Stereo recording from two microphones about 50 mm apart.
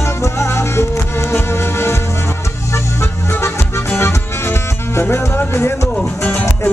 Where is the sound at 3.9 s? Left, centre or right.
Left.